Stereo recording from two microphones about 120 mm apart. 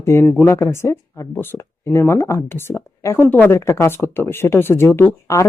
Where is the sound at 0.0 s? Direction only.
20° left (ahead or behind).